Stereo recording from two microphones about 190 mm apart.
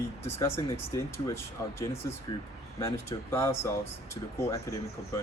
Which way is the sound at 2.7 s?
15° left (ahead or behind).